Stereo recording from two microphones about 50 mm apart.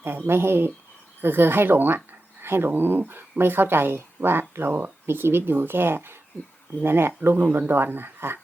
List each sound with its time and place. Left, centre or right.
0.3 s speech: right
2.4 s a sound: right
2.6 s speech: right
7.2 s speech: right